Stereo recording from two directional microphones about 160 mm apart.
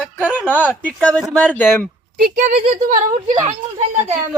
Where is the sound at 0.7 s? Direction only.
10° left (ahead or behind).